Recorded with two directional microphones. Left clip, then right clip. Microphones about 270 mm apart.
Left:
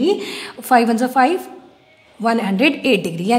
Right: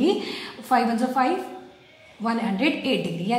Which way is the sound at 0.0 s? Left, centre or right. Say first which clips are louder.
Left 5 dB; left.